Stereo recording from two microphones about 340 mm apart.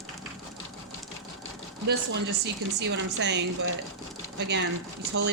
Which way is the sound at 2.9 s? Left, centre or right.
Right.